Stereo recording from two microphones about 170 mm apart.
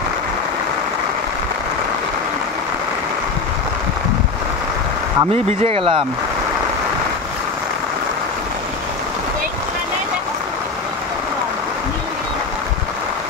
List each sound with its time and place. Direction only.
5.3 s speech: 40° right (ahead or behind)